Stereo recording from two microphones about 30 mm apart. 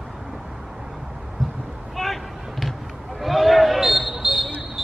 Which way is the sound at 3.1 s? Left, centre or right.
Centre.